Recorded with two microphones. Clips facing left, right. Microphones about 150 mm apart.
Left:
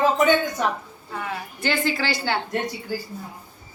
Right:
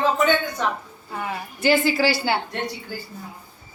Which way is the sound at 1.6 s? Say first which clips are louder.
Right 6 dB; 5° right (ahead or behind).